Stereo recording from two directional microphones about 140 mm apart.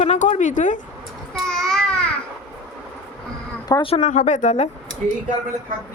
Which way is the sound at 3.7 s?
40° left (ahead or behind).